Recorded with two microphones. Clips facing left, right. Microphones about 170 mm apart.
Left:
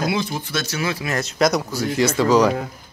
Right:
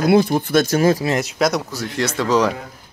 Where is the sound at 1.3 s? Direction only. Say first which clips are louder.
Left 1 dB; centre (ahead or behind).